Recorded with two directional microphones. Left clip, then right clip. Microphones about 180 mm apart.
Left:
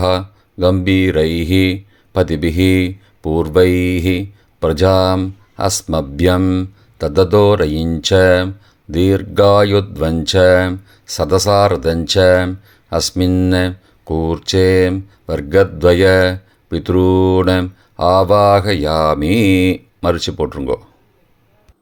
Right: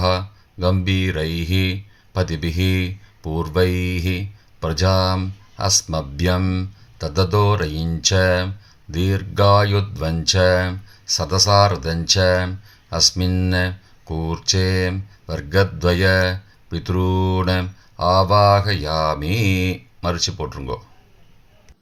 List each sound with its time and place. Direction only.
0.0 s speech: 45° left (ahead or behind)